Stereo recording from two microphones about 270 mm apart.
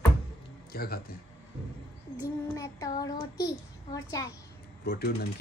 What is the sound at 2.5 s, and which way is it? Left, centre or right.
A child's voice, centre.